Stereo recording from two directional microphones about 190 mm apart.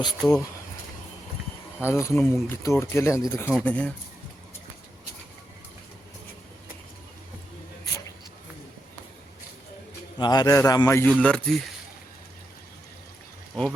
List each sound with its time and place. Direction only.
0.2 s speech: 5° left (ahead or behind)
1.8 s speech: 15° left (ahead or behind)
10.2 s a man's voice: 20° left (ahead or behind)
11.1 s speech: 5° left (ahead or behind)